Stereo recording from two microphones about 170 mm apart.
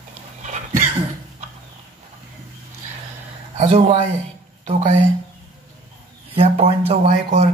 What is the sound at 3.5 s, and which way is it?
Speech, 35° right (ahead or behind).